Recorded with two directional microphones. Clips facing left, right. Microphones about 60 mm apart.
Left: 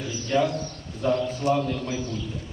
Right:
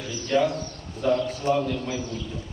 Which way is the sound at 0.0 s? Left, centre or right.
Centre.